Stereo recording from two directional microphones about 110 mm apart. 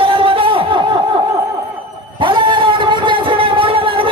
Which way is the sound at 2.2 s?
45° right (ahead or behind).